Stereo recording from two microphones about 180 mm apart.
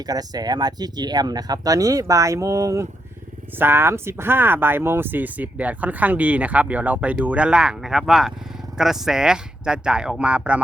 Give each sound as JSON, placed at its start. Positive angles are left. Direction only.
{"t": 0.0, "sound": "speech", "side_deg": -20}